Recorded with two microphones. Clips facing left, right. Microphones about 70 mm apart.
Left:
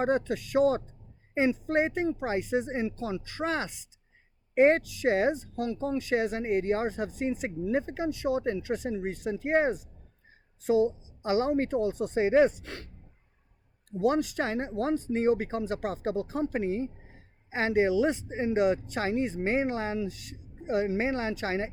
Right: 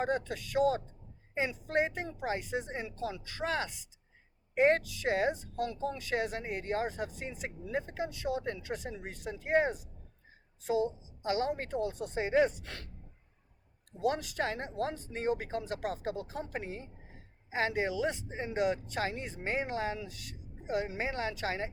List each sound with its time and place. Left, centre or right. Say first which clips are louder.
0.0 s speech: left 6 dB; left
11.3 s speech: left 6 dB; left
14.0 s speech: left 5 dB; left